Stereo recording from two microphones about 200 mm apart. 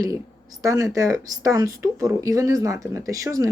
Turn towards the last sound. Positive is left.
turn(degrees=-15)  # may be behind; listen again after turning